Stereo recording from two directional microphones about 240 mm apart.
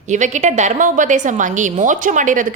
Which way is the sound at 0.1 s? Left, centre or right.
Right.